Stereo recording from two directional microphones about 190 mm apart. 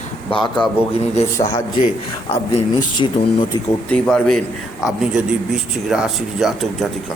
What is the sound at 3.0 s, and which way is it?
Speech, 25° left (ahead or behind).